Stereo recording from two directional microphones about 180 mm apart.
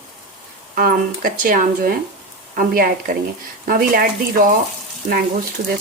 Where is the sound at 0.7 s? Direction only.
50° right (ahead or behind).